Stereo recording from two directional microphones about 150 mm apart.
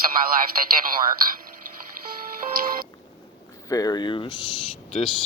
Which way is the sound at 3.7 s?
25° left (ahead or behind).